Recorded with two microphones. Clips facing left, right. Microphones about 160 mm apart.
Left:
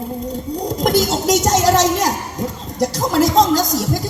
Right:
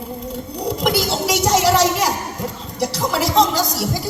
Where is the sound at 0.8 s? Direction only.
45° left (ahead or behind).